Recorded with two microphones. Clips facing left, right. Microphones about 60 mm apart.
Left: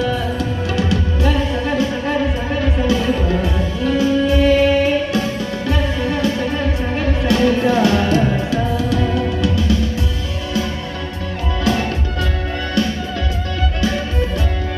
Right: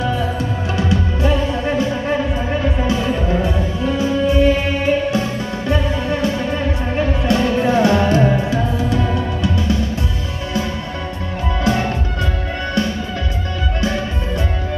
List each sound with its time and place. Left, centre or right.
0.8 s music: right
2.8 s music: right
7.3 s music: right
11.6 s music: right